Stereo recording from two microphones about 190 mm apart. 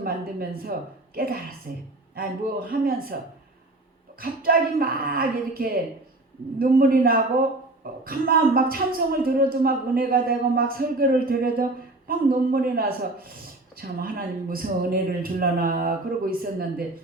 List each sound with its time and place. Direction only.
0.0 s a man's voice: 50° right (ahead or behind)
4.2 s a man's voice: 50° right (ahead or behind)